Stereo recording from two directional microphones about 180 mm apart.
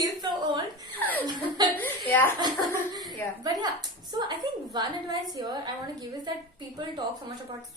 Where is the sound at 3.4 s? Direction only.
20° right (ahead or behind).